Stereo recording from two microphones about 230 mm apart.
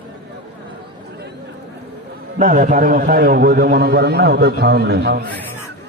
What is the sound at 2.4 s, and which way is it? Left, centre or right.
A man's voice, right.